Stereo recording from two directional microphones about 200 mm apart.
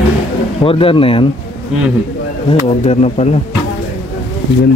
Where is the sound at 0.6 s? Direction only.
30° left (ahead or behind).